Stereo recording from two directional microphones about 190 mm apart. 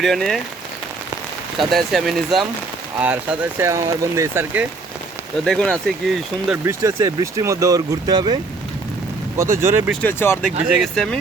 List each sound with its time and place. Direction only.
0.0 s speech: centre (ahead or behind)
1.5 s speech: centre (ahead or behind)
5.5 s speech: centre (ahead or behind)
6.5 s speech: 15° right (ahead or behind)
9.4 s speech: 15° right (ahead or behind)
9.9 s speech: 10° left (ahead or behind)